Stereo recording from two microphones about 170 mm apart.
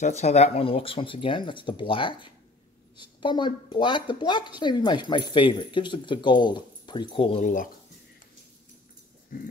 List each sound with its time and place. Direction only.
0.0 s speech: 40° left (ahead or behind)
7.4 s speech: 50° left (ahead or behind)
9.3 s a sound: 55° left (ahead or behind)